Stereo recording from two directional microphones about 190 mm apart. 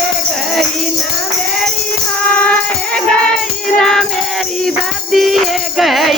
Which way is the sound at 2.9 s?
5° left (ahead or behind).